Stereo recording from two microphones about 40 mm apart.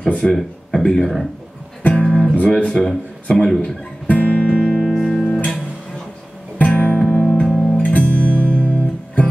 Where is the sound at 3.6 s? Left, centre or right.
Left.